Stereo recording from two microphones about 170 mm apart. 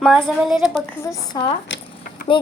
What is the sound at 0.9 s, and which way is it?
Speech, 15° left (ahead or behind).